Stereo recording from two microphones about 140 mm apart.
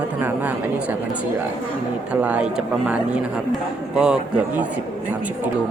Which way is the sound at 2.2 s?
10° right (ahead or behind).